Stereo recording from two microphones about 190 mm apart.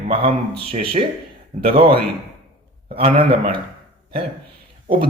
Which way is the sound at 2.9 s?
30° right (ahead or behind).